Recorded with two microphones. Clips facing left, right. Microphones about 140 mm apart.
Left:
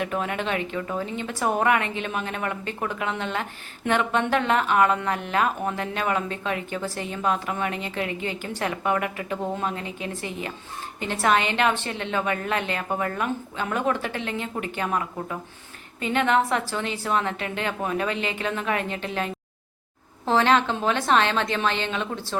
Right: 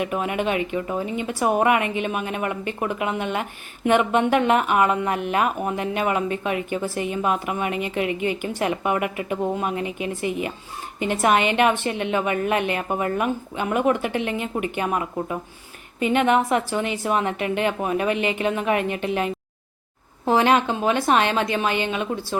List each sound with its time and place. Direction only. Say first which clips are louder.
0.0 s speech: right 3 dB; 15° right (ahead or behind)